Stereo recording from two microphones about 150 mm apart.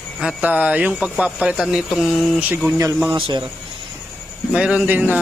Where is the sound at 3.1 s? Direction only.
30° right (ahead or behind).